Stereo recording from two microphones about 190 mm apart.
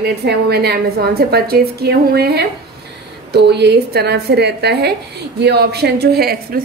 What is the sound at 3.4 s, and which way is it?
A woman's voice, 60° right (ahead or behind).